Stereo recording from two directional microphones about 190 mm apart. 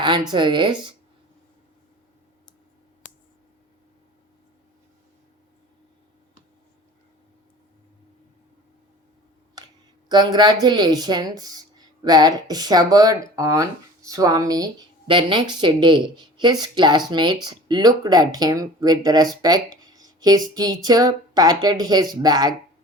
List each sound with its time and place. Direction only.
0.0 s speech: 25° right (ahead or behind)
10.1 s speech: 20° right (ahead or behind)